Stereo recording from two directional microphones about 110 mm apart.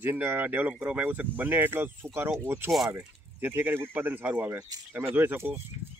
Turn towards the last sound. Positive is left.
turn(degrees=-20)  # may be behind; listen again after turning